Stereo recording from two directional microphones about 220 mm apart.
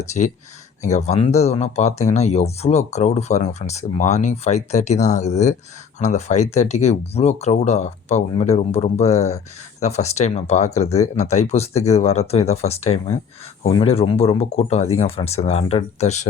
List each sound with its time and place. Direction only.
0.0 s speech: 30° left (ahead or behind)